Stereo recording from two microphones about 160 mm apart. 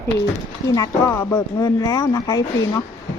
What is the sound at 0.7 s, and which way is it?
A woman's voice, 20° left (ahead or behind).